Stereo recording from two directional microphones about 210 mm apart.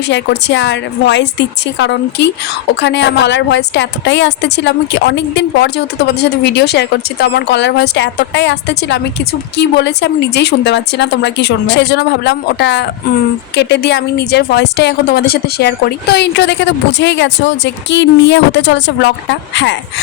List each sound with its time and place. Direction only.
0.1 s speech: 60° left (ahead or behind)